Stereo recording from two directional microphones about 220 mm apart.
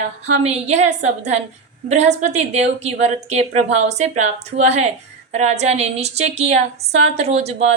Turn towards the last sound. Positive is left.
turn(degrees=-30)  # may be behind; listen again after turning